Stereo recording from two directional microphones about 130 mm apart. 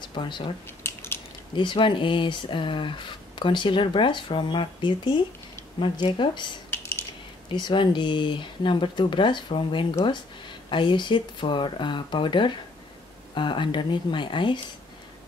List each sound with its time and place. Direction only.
0.0 s speech: 40° left (ahead or behind)
0.7 s a sound: 20° left (ahead or behind)
1.5 s speech: 40° left (ahead or behind)